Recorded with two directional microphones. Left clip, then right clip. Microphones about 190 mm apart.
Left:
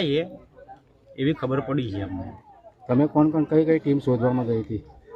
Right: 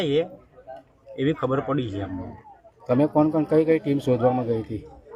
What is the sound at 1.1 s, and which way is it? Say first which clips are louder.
Speech: right 1 dB; 5° left (ahead or behind).